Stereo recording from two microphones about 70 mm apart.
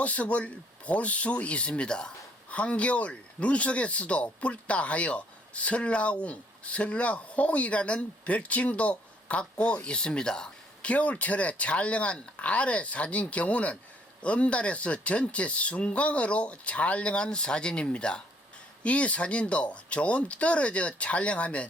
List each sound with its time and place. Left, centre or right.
0.0 s speech: centre